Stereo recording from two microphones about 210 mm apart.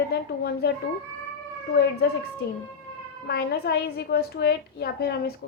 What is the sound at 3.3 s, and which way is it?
A woman's voice, 50° left (ahead or behind).